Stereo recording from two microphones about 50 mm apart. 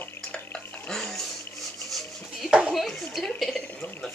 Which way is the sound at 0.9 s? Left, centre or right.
Centre.